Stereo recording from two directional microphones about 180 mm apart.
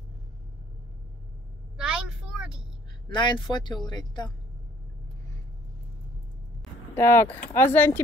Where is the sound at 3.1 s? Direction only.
25° left (ahead or behind).